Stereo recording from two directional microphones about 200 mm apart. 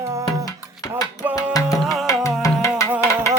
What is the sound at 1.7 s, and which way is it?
Music, centre (ahead or behind).